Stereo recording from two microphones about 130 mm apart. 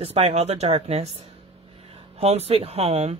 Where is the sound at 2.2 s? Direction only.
50° right (ahead or behind).